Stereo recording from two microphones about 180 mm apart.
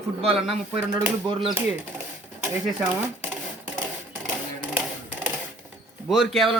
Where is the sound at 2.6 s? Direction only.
10° right (ahead or behind).